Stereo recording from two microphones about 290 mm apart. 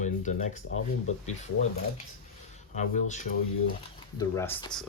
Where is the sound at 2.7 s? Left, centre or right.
Left.